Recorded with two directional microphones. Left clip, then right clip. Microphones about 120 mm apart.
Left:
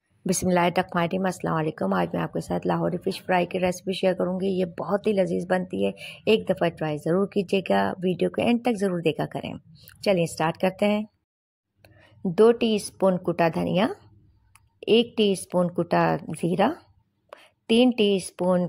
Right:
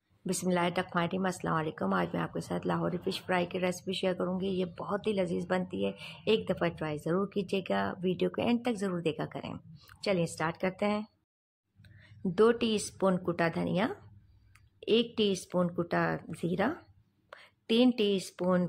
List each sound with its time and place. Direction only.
0.3 s a woman's voice: 55° left (ahead or behind)
0.9 s speech: 45° left (ahead or behind)
12.4 s speech: 35° left (ahead or behind)
15.9 s a woman's voice: 55° left (ahead or behind); by 18.7 s 25° left (ahead or behind)